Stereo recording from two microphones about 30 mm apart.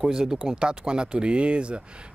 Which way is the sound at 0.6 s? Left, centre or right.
Right.